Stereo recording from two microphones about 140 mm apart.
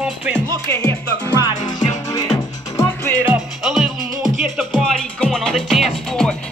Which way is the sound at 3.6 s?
5° right (ahead or behind).